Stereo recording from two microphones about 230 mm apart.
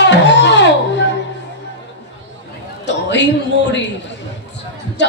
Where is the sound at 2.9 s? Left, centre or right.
Left.